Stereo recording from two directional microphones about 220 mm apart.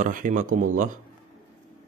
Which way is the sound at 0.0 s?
35° right (ahead or behind).